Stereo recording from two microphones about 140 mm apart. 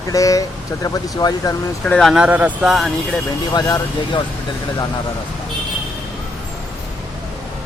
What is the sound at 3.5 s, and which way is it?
Speech, 25° left (ahead or behind).